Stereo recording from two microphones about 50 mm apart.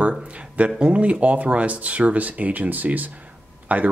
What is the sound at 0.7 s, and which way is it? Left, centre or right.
Speech, right.